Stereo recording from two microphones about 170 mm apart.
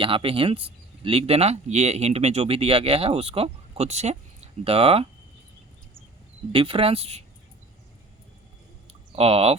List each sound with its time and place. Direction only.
0.0 s speech: 30° right (ahead or behind)
6.5 s speech: 30° right (ahead or behind)
8.9 s a sound: 35° right (ahead or behind)